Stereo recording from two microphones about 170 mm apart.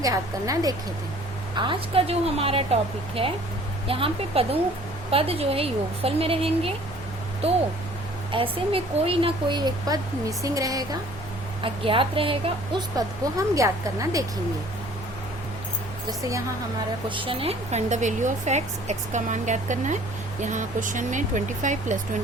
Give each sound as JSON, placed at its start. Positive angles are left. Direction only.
{"t": 0.0, "sound": "a woman's voice", "side_deg": -20}
{"t": 3.8, "sound": "a woman's voice", "side_deg": -35}
{"t": 11.6, "sound": "a woman's voice", "side_deg": -30}
{"t": 17.1, "sound": "a woman's voice", "side_deg": -30}